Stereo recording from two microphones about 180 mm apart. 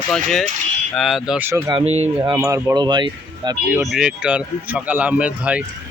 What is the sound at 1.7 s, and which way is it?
Speech, 35° right (ahead or behind).